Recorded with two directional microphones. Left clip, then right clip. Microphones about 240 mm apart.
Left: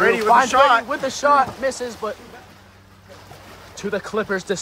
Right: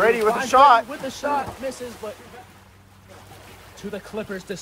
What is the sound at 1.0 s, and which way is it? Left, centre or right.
Speech, left.